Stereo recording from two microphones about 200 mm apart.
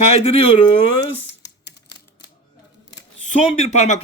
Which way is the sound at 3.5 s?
35° left (ahead or behind).